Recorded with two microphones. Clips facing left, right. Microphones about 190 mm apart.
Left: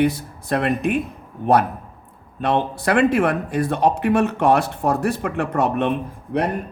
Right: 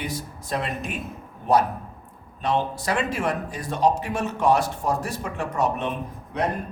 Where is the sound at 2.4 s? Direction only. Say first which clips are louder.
Left 4 dB; 60° left (ahead or behind).